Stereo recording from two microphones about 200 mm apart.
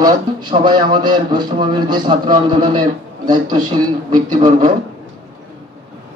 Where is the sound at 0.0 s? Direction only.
20° right (ahead or behind).